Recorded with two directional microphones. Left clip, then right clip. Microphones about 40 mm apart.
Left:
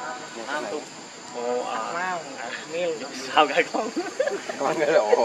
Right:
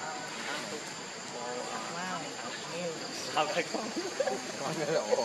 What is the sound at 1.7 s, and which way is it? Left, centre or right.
Vehicle, left.